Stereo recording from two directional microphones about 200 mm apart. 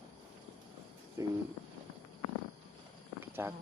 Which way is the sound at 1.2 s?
15° right (ahead or behind).